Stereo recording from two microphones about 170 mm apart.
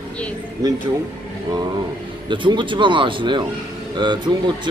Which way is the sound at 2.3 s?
30° right (ahead or behind).